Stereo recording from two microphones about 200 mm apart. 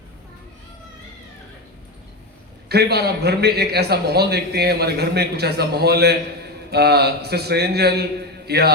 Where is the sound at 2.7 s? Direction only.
55° right (ahead or behind).